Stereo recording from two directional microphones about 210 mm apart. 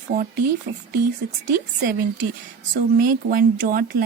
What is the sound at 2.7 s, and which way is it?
A woman's voice, 45° right (ahead or behind).